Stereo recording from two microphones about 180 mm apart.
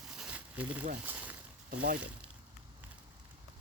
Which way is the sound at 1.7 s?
55° right (ahead or behind).